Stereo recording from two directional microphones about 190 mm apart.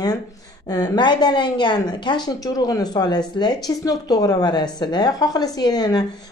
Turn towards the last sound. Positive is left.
turn(degrees=20)  # may be behind; listen again after turning